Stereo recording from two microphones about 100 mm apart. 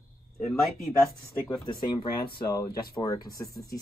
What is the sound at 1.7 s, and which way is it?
Speech, 45° left (ahead or behind).